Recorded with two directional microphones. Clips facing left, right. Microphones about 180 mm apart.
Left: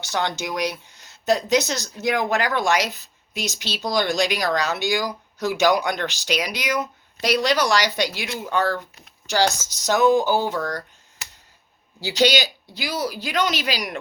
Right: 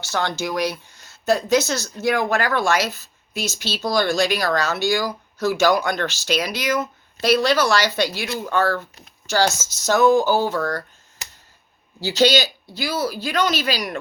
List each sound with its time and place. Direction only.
0.0 s speech: 15° left (ahead or behind)
11.9 s speech: 15° left (ahead or behind)